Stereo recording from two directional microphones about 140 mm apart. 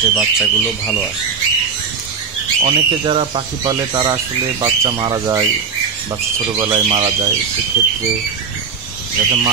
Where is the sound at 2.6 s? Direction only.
40° right (ahead or behind).